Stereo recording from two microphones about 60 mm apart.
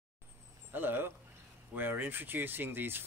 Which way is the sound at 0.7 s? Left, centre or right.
Right.